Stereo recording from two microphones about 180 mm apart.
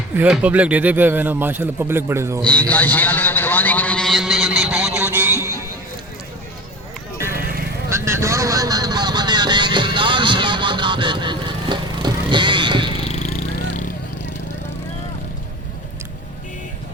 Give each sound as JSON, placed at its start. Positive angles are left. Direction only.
{"t": 0.2, "sound": "speech", "side_deg": -10}
{"t": 2.4, "sound": "a sound", "side_deg": 5}
{"t": 7.3, "sound": "vehicle", "side_deg": -55}
{"t": 7.9, "sound": "vehicle", "side_deg": -15}
{"t": 13.1, "sound": "vehicle", "side_deg": 40}